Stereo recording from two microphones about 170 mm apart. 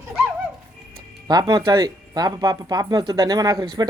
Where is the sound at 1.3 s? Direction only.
25° right (ahead or behind).